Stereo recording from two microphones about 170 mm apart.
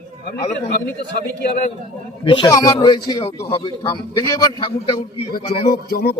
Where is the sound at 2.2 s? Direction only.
30° left (ahead or behind).